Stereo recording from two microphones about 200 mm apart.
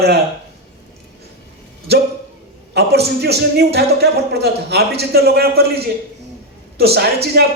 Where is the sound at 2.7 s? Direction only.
55° right (ahead or behind).